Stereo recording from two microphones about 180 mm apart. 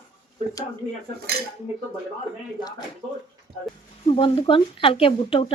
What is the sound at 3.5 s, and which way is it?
Speech, 60° right (ahead or behind).